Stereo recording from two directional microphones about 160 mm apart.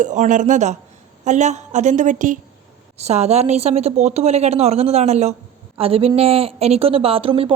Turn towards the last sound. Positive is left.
turn(degrees=-35)  # may be behind; listen again after turning